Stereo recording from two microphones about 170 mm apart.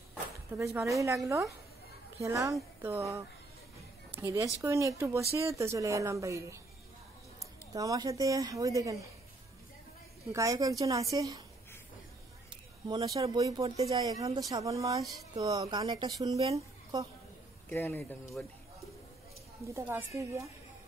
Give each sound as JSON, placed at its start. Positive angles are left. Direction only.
{"t": 0.6, "sound": "a woman's voice", "side_deg": -20}
{"t": 10.3, "sound": "a woman's voice", "side_deg": -20}
{"t": 12.8, "sound": "a woman's voice", "side_deg": -25}
{"t": 17.6, "sound": "speech", "side_deg": 10}
{"t": 19.7, "sound": "a woman's voice", "side_deg": -15}